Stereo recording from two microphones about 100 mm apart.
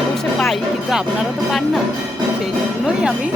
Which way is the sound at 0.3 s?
Centre (ahead or behind).